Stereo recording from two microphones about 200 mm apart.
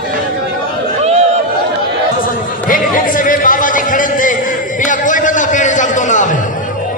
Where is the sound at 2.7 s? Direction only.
45° left (ahead or behind).